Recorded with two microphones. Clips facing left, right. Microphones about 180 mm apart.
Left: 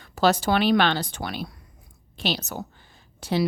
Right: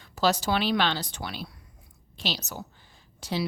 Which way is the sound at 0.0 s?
55° left (ahead or behind).